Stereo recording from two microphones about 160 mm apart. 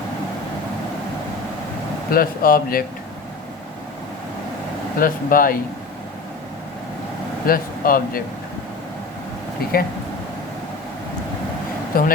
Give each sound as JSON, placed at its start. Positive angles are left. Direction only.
{"t": 2.0, "sound": "speech", "side_deg": 65}
{"t": 4.9, "sound": "speech", "side_deg": 65}
{"t": 7.4, "sound": "speech", "side_deg": 65}
{"t": 11.9, "sound": "speech", "side_deg": 65}